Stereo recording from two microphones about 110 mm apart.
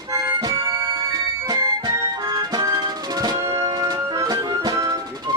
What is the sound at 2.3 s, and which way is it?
Music, 35° right (ahead or behind).